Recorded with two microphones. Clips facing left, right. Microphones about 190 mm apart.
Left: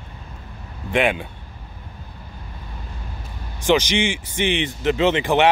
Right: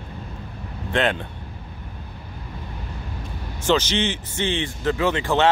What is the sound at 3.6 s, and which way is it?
Speech, 15° left (ahead or behind).